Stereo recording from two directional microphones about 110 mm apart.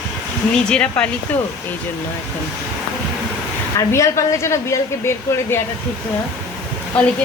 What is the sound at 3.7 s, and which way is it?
Speech, 30° left (ahead or behind).